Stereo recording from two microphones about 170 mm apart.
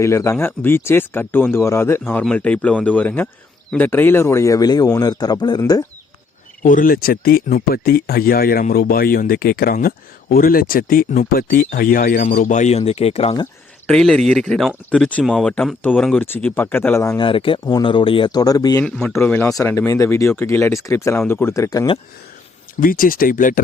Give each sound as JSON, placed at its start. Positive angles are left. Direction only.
{"t": 0.0, "sound": "speech", "side_deg": 15}
{"t": 6.6, "sound": "speech", "side_deg": 55}
{"t": 13.8, "sound": "speech", "side_deg": 5}
{"t": 17.2, "sound": "speech", "side_deg": 30}
{"t": 22.8, "sound": "speech", "side_deg": 55}